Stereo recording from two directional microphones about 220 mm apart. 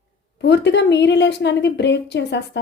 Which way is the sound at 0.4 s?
50° left (ahead or behind).